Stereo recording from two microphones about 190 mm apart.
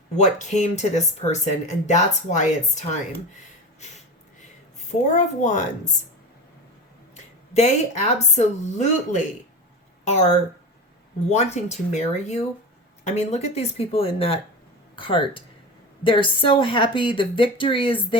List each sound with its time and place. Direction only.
0.2 s speech: 40° left (ahead or behind)
4.9 s speech: 40° left (ahead or behind)
7.2 s speech: 35° left (ahead or behind)
11.3 s a woman's voice: 35° left (ahead or behind)